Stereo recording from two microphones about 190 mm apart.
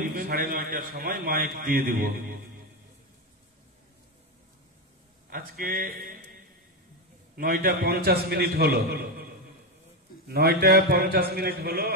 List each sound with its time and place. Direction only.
0.1 s a man's voice: 50° right (ahead or behind)
5.3 s a man's voice: 50° right (ahead or behind)
7.3 s a man's voice: 50° right (ahead or behind)
10.2 s a man's voice: 55° right (ahead or behind)